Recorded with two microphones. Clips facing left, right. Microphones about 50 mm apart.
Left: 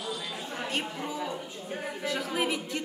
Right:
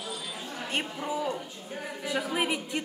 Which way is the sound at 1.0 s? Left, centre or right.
Centre.